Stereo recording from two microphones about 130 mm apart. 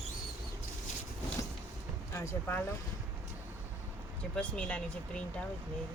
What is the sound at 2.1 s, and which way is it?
Speech, 20° left (ahead or behind).